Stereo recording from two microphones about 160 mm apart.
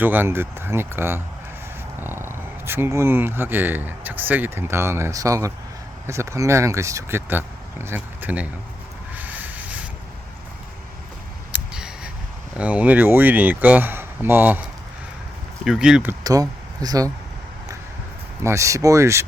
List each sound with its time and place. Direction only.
0.0 s speech: 10° right (ahead or behind)
9.1 s vehicle: 10° right (ahead or behind)
11.5 s a sound: 5° right (ahead or behind)
12.5 s speech: 10° right (ahead or behind)
15.6 s speech: 5° right (ahead or behind)
16.2 s speech: 25° right (ahead or behind)
18.4 s speech: 20° right (ahead or behind)